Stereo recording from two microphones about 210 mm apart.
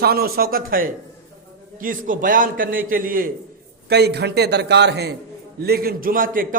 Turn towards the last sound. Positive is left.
turn(degrees=-40)  # may be behind; listen again after turning